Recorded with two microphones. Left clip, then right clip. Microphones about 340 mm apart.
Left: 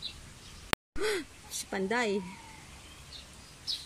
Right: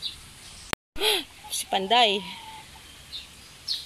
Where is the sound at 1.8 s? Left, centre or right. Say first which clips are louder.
Right 10 dB; right.